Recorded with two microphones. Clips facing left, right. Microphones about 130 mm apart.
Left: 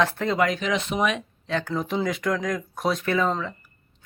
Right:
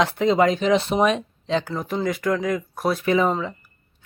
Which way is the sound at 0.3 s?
25° right (ahead or behind).